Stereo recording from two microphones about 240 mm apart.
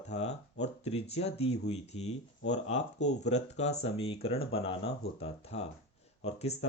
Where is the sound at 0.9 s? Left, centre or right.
Left.